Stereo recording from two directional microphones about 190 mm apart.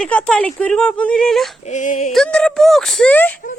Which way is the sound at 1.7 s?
40° left (ahead or behind).